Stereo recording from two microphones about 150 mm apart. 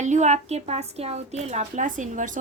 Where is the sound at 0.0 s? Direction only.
50° right (ahead or behind).